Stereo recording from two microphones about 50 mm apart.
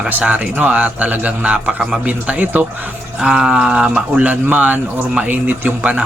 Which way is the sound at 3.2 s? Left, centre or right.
Centre.